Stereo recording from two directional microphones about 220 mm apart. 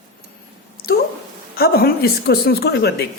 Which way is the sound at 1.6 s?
45° left (ahead or behind).